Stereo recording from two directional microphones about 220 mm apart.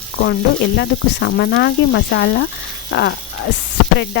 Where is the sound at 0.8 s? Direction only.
50° left (ahead or behind).